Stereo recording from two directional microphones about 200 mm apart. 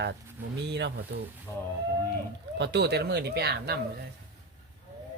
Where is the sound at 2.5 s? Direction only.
60° right (ahead or behind).